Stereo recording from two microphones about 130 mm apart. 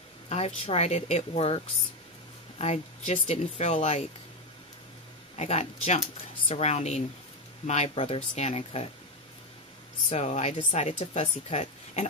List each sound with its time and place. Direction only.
0.3 s speech: 55° left (ahead or behind)
2.6 s speech: 55° left (ahead or behind)
5.3 s speech: 55° left (ahead or behind)
10.1 s speech: 55° left (ahead or behind)